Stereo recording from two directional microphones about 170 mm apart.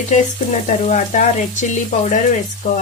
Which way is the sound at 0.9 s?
45° left (ahead or behind).